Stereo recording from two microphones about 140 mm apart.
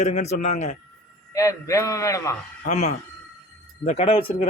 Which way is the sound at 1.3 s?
25° left (ahead or behind).